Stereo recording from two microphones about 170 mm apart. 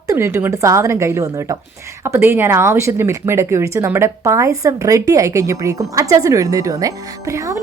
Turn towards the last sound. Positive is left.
turn(degrees=-20)  # may be behind; listen again after turning